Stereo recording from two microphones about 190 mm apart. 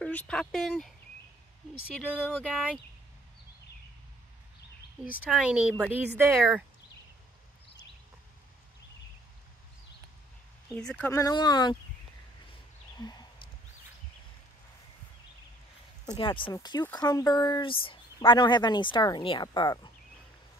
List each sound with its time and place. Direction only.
0.0 s speech: 5° left (ahead or behind)
2.1 s speech: 5° right (ahead or behind)
5.3 s speech: 5° right (ahead or behind)
10.8 s speech: 5° left (ahead or behind)
11.1 s speech: 15° left (ahead or behind)
13.0 s speech: 20° left (ahead or behind)
16.1 s speech: 25° left (ahead or behind)